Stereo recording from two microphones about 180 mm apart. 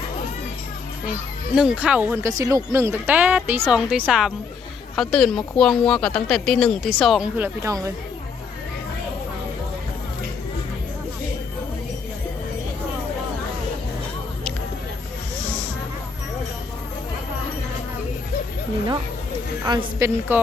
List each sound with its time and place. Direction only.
1.5 s speech: 5° right (ahead or behind)
19.6 s a woman's voice: 25° right (ahead or behind)
20.3 s speech: 10° right (ahead or behind)